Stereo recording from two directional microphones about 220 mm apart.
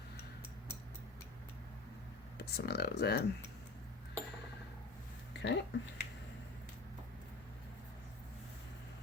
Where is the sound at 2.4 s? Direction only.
45° left (ahead or behind).